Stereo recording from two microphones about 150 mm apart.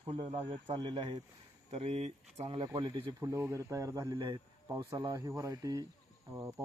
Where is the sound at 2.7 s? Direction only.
30° right (ahead or behind).